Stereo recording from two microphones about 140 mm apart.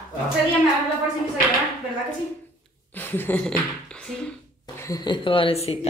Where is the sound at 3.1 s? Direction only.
15° left (ahead or behind).